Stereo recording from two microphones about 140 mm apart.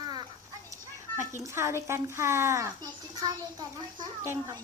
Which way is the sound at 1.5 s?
20° right (ahead or behind).